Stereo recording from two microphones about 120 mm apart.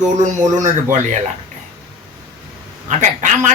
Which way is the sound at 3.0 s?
90° right.